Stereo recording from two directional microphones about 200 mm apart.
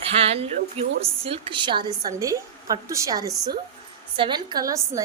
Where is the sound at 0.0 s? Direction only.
30° right (ahead or behind).